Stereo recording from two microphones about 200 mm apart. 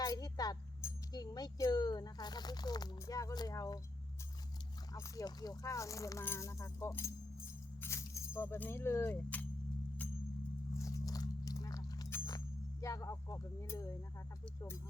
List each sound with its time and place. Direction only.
0.0 s speech: 20° left (ahead or behind)
4.9 s speech: 15° left (ahead or behind)
10.8 s a sound: 15° left (ahead or behind)
12.8 s speech: 15° left (ahead or behind)